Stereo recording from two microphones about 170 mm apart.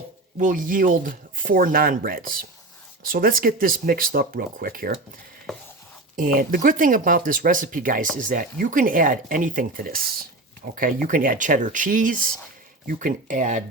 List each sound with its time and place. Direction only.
0.3 s speech: 50° right (ahead or behind)
6.1 s speech: 55° right (ahead or behind)